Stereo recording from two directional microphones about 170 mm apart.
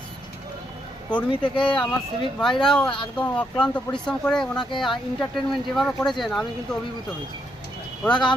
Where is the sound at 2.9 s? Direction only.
30° left (ahead or behind).